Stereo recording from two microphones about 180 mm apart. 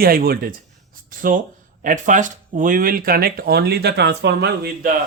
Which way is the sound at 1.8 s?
45° right (ahead or behind).